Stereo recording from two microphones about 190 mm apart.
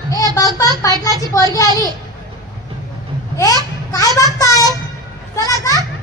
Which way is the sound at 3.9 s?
20° left (ahead or behind).